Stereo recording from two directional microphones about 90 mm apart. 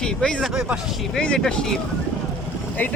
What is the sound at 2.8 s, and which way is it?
Speech, 20° left (ahead or behind).